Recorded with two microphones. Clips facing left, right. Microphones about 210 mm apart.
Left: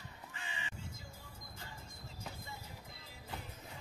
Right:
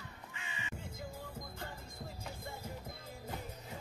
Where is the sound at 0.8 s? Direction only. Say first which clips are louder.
Right 6 dB; 55° right (ahead or behind).